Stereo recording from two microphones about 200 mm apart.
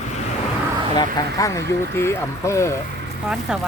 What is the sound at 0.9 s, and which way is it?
Speech, 15° left (ahead or behind).